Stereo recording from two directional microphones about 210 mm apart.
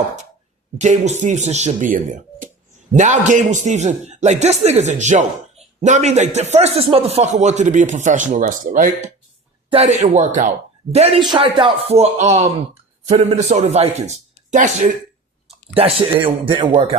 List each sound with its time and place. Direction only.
0.8 s a man's voice: 35° right (ahead or behind)